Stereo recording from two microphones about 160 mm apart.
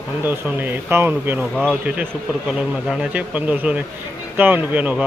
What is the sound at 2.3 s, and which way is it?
Speech, 5° right (ahead or behind).